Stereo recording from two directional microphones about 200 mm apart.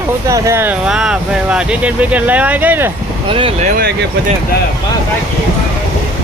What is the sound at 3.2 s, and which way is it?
Speech, 25° right (ahead or behind).